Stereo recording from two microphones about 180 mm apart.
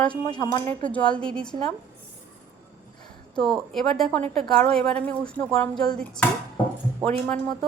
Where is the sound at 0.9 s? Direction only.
5° left (ahead or behind).